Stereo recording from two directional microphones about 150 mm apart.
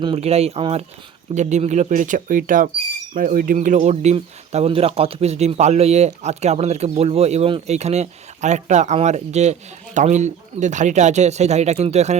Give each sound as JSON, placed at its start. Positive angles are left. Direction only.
{"t": 0.0, "sound": "speech", "side_deg": -40}